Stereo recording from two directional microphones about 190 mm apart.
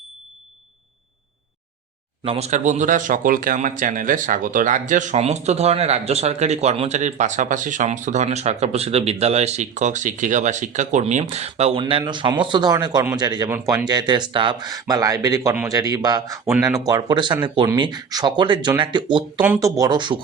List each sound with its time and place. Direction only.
2.2 s speech: 30° right (ahead or behind)